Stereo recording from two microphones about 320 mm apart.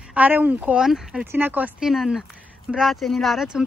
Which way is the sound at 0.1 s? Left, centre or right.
Centre.